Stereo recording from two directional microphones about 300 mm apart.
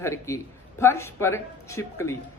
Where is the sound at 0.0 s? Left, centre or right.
Centre.